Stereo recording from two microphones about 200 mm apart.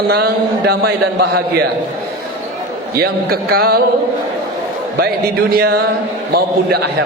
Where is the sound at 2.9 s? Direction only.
50° right (ahead or behind).